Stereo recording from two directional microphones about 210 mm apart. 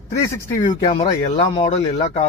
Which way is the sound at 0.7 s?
30° left (ahead or behind).